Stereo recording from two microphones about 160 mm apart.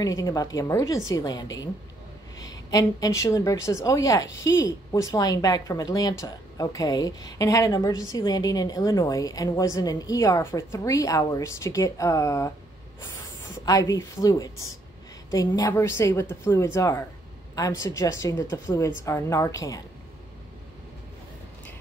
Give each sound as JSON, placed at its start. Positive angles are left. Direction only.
{"t": 0.0, "sound": "a woman's voice", "side_deg": 20}
{"t": 13.7, "sound": "a woman's voice", "side_deg": 20}